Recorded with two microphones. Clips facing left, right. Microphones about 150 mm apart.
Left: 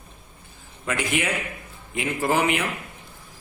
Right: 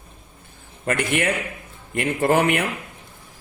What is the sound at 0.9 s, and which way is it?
A man's voice, 55° right (ahead or behind).